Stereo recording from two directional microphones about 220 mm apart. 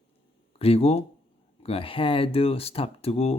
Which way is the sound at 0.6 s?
25° left (ahead or behind).